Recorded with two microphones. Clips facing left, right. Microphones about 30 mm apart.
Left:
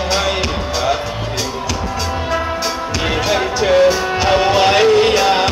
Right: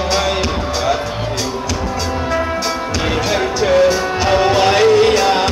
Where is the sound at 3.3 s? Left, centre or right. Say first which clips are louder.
Left 1 dB; centre.